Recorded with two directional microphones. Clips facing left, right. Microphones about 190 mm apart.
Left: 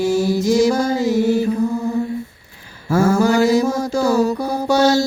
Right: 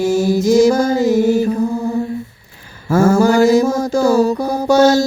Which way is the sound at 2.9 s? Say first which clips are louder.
Right 3 dB; 45° right (ahead or behind).